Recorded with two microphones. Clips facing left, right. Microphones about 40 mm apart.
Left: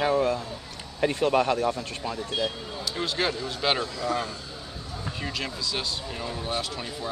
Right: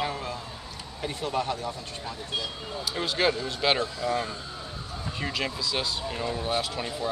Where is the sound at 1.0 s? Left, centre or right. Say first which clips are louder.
Left 7 dB; left.